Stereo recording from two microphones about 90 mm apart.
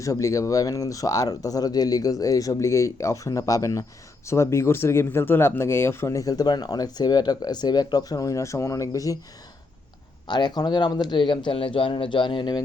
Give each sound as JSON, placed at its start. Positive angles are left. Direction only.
{"t": 0.0, "sound": "speech", "side_deg": 40}
{"t": 10.2, "sound": "speech", "side_deg": 50}